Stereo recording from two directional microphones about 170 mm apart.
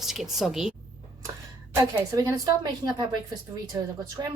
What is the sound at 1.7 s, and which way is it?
A woman's voice, 15° right (ahead or behind).